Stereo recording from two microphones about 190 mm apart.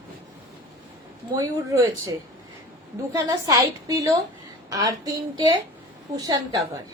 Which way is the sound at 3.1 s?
15° right (ahead or behind).